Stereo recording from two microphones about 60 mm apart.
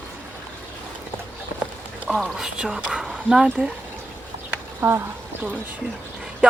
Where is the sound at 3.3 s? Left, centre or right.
Centre.